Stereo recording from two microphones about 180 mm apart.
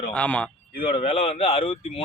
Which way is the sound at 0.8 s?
30° left (ahead or behind).